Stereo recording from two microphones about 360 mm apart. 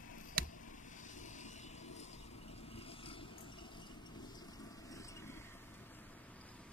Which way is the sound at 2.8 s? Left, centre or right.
Centre.